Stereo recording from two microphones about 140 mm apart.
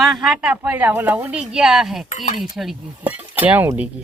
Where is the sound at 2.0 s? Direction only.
55° left (ahead or behind).